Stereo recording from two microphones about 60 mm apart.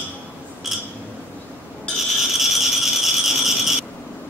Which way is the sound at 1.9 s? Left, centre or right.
Centre.